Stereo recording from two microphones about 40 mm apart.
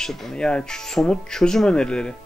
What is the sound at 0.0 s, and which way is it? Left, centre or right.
Speech, centre.